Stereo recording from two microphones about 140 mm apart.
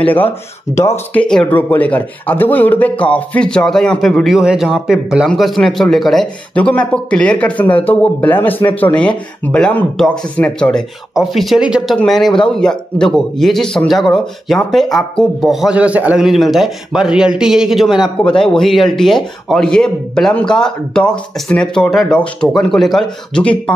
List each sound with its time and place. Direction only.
0.0 s speech: 10° left (ahead or behind)
1.2 s speech: 5° left (ahead or behind)